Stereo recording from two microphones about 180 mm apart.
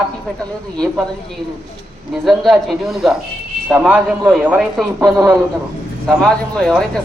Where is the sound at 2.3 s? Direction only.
Centre (ahead or behind); by 5.3 s 15° right (ahead or behind).